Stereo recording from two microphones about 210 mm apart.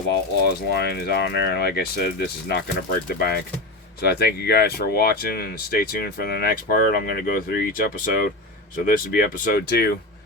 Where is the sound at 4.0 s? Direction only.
50° left (ahead or behind).